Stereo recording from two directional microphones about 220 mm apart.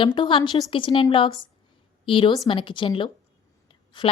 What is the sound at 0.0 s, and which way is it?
A woman's voice, 20° left (ahead or behind).